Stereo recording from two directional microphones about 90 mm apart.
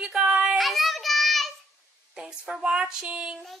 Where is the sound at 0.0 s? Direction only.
10° right (ahead or behind).